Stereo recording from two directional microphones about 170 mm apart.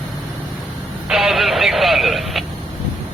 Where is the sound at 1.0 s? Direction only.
Centre (ahead or behind).